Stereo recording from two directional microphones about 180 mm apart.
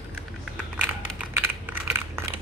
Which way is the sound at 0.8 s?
10° right (ahead or behind).